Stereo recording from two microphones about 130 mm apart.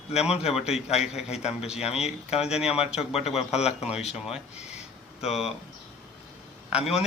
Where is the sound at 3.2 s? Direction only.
55° left (ahead or behind).